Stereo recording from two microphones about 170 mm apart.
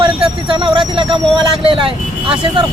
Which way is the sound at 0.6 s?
30° right (ahead or behind).